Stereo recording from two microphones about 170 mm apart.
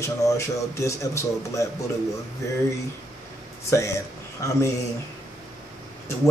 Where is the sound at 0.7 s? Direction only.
15° left (ahead or behind).